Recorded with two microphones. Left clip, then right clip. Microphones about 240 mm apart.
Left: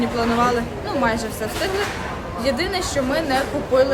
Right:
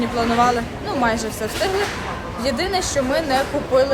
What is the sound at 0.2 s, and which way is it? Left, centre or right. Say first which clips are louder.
Speech: right 2 dB; centre.